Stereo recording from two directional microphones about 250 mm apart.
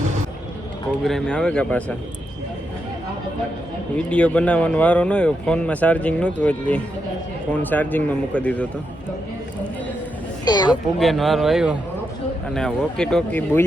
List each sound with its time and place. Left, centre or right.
0.9 s speech: centre
3.9 s speech: centre
10.4 s speech: centre
11.0 s speech: centre